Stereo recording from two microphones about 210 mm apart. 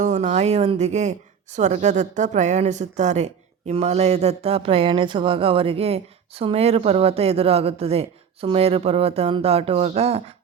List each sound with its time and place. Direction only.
0.0 s speech: 35° right (ahead or behind)